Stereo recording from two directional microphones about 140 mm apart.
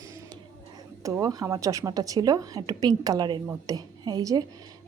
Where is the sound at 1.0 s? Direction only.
20° right (ahead or behind).